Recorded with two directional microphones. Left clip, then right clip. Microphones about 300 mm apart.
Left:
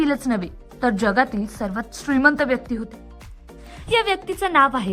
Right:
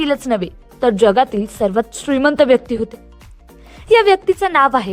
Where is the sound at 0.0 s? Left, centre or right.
Centre.